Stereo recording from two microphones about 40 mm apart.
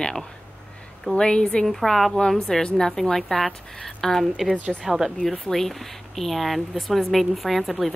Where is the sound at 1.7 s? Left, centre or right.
Centre.